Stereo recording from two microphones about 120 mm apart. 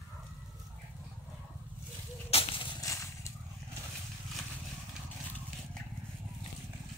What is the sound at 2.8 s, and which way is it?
Vehicle, 25° left (ahead or behind).